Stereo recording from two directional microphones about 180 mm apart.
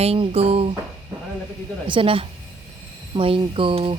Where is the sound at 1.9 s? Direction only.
30° right (ahead or behind).